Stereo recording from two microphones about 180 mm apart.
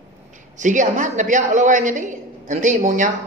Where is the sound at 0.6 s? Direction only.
45° right (ahead or behind).